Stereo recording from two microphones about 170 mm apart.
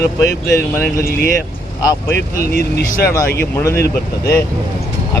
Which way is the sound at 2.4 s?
65° left (ahead or behind).